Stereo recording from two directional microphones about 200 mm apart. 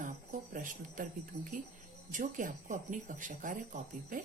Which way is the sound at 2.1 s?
40° right (ahead or behind).